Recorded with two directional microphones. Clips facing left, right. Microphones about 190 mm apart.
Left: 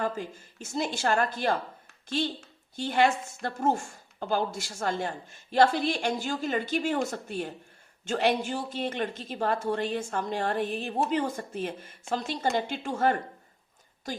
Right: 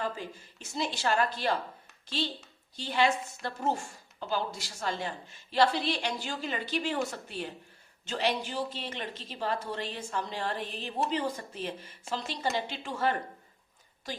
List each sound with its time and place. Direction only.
0.0 s a woman's voice: 50° left (ahead or behind)